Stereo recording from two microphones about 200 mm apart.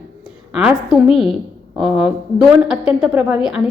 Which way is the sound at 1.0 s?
30° left (ahead or behind).